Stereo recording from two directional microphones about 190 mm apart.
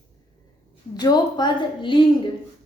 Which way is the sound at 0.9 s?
20° left (ahead or behind).